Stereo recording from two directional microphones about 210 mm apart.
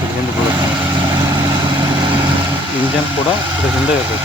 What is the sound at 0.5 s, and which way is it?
Vehicle, 20° right (ahead or behind).